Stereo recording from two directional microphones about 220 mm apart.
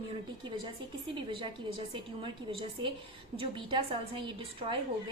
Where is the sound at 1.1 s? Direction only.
20° right (ahead or behind).